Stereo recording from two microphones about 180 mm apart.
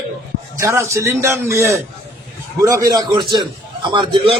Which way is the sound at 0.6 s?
15° right (ahead or behind).